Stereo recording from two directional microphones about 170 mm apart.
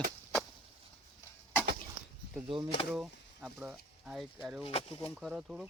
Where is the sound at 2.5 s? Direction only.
30° right (ahead or behind).